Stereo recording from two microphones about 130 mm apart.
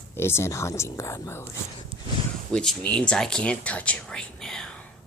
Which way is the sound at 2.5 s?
5° left (ahead or behind).